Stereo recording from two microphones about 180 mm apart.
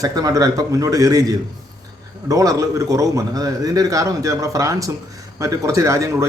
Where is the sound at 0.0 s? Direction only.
20° right (ahead or behind).